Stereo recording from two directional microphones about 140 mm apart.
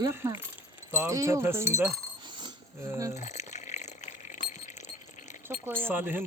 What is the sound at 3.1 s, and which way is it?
Glass, 55° left (ahead or behind).